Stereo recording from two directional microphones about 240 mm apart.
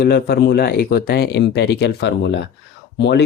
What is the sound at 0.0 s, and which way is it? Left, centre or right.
Speech, left.